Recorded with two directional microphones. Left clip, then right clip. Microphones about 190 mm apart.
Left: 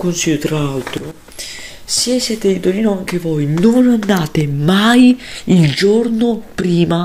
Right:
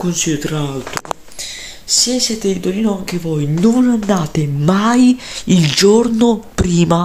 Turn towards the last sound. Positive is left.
turn(degrees=-15)  # may be behind; listen again after turning